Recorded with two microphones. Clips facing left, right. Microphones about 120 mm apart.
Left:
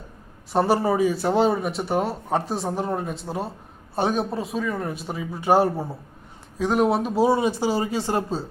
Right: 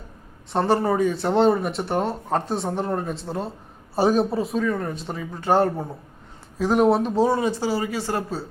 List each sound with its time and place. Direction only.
0.5 s speech: 5° left (ahead or behind)